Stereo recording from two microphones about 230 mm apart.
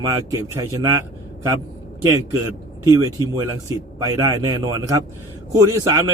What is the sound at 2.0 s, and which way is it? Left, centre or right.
A man's voice, centre.